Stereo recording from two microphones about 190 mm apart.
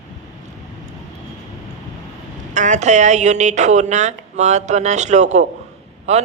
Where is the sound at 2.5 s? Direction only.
40° right (ahead or behind).